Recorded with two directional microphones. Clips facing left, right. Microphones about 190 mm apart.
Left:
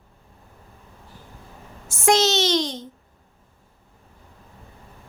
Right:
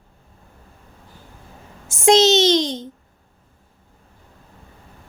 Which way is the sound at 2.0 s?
20° right (ahead or behind).